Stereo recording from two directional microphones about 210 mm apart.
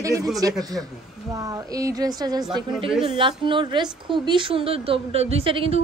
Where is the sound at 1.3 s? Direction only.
15° right (ahead or behind).